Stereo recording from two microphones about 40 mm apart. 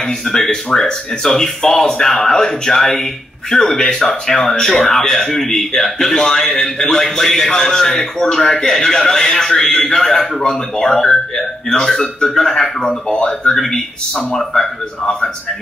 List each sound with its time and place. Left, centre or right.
0.2 s speech: centre
13.6 s speech: centre